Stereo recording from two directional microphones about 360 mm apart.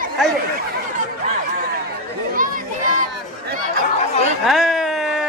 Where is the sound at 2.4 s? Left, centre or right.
Right.